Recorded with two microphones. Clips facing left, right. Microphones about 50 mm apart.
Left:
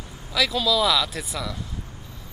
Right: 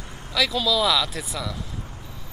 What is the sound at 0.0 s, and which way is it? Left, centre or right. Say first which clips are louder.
Vehicle: right 1 dB; right.